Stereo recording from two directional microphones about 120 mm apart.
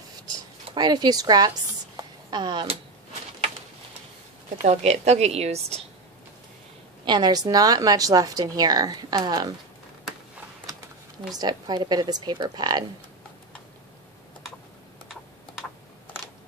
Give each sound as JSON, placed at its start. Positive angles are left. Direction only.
{"t": 0.7, "sound": "a woman's voice", "side_deg": -35}
{"t": 4.6, "sound": "speech", "side_deg": -65}
{"t": 7.1, "sound": "a woman's voice", "side_deg": -35}
{"t": 11.3, "sound": "a woman's voice", "side_deg": -35}